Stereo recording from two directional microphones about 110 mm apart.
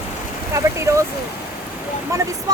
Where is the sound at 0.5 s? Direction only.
25° right (ahead or behind).